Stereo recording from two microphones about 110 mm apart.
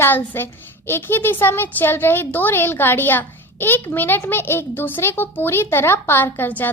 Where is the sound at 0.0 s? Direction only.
20° left (ahead or behind).